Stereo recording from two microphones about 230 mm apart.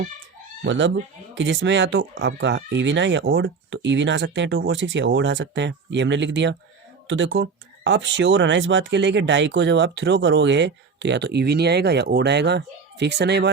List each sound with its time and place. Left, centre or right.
0.6 s speech: right